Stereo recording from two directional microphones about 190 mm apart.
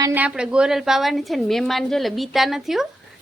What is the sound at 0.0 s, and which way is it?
A woman's voice, 10° right (ahead or behind).